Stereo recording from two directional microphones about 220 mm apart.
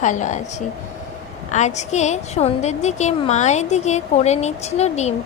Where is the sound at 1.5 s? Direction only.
30° left (ahead or behind).